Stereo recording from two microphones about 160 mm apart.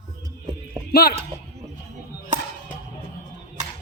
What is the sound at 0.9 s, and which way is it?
Speech, 80° left.